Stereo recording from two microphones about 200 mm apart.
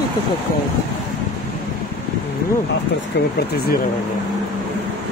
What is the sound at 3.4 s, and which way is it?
Speech, 50° left (ahead or behind).